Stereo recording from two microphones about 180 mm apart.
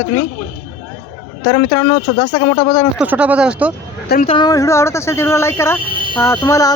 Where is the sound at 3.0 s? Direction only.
10° right (ahead or behind).